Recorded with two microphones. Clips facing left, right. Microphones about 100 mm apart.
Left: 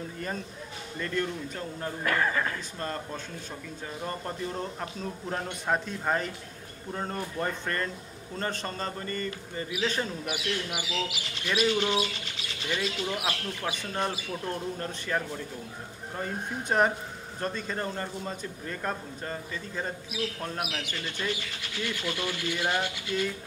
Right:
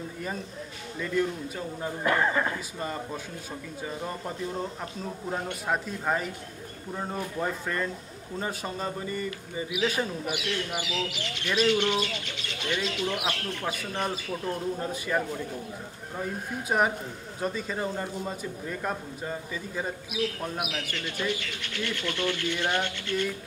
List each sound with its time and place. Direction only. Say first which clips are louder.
0.9 s a man's voice: right 3 dB; 5° right (ahead or behind)
2.0 s speech: right 3 dB; 20° right (ahead or behind)
2.8 s a man's voice: even; 10° right (ahead or behind)
5.7 s a man's voice: even; 5° right (ahead or behind)
10.2 s speech: right 1 dB; 5° left (ahead or behind)
13.7 s a man's voice: even; 5° right (ahead or behind)
22.0 s speech: right 5 dB; 10° left (ahead or behind)